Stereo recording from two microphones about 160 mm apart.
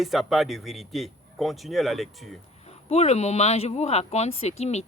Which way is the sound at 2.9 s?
45° left (ahead or behind).